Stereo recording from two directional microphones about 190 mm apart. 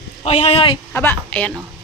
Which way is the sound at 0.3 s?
35° left (ahead or behind).